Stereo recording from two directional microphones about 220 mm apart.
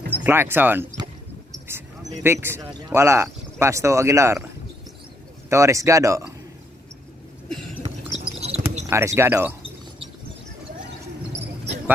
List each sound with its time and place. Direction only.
0.2 s speech: 10° right (ahead or behind)
2.2 s speech: 10° right (ahead or behind)
5.5 s speech: 15° right (ahead or behind)
7.4 s cough: centre (ahead or behind)
8.4 s basketball bounce: 30° right (ahead or behind)
8.9 s speech: 10° right (ahead or behind)